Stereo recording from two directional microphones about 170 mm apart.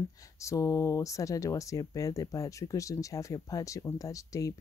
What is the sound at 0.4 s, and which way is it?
Speech, 20° left (ahead or behind).